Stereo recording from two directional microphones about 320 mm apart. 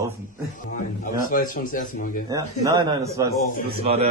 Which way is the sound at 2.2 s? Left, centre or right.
Centre.